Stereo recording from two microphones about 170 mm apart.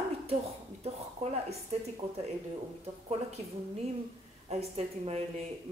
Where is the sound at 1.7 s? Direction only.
40° right (ahead or behind).